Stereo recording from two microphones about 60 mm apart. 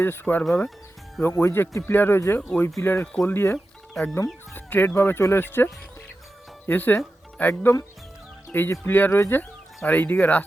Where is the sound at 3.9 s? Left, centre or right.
Centre.